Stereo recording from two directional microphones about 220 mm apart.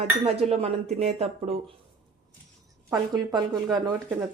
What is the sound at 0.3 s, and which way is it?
A woman's voice, 25° right (ahead or behind).